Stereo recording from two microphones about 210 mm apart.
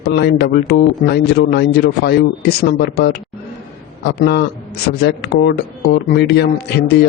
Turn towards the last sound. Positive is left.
turn(degrees=50)  # may be behind; listen again after turning